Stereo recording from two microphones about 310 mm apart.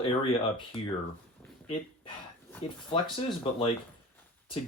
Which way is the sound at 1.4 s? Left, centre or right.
Centre.